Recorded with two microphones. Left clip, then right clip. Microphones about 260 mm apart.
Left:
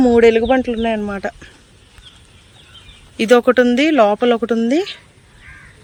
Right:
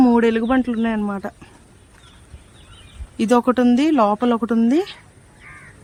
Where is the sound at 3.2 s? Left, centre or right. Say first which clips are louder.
Left 5 dB; centre.